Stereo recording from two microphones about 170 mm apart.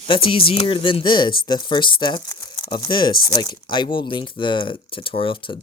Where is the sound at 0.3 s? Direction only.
30° left (ahead or behind).